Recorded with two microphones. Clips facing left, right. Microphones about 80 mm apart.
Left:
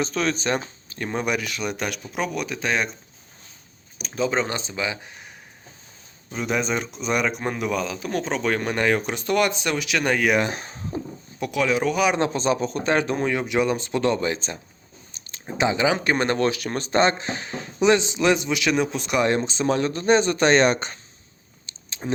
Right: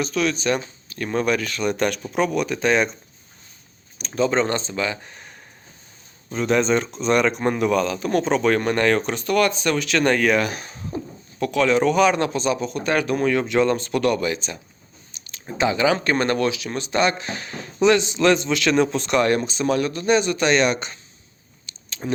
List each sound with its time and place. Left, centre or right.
0.0 s speech: left; by 2.9 s centre
3.9 s speech: centre
6.3 s speech: centre
10.4 s speech: left
10.9 s speech: centre
12.1 s speech: left
15.1 s a sound: left
15.4 s speech: left
16.5 s speech: left; by 19.2 s centre
19.2 s speech: left
21.7 s a sound: left